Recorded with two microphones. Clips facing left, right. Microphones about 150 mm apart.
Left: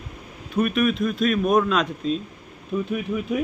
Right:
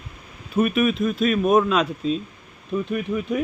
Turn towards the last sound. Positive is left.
turn(degrees=0)  # may be behind; listen again after turning